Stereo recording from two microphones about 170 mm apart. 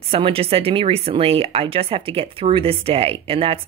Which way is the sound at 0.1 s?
35° right (ahead or behind).